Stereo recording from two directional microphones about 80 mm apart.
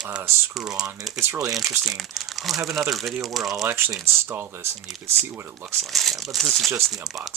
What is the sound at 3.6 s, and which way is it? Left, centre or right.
Speech, right.